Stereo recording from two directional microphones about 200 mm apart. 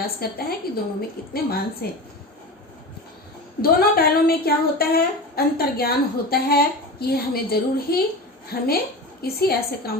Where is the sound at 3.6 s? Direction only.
50° left (ahead or behind).